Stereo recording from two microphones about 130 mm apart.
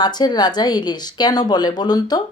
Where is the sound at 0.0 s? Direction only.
30° left (ahead or behind).